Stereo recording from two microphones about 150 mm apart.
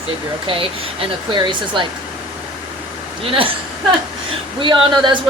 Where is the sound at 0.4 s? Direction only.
35° right (ahead or behind).